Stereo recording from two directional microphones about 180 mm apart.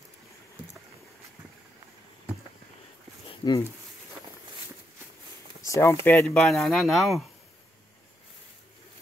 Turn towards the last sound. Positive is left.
turn(degrees=0)  # may be behind; listen again after turning